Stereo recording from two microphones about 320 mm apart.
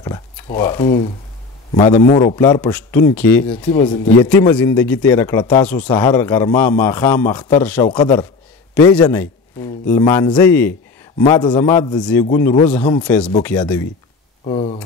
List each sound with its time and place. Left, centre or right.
0.0 s a man's voice: centre
2.3 s a man's voice: centre
4.3 s a man's voice: centre
14.4 s a man's voice: centre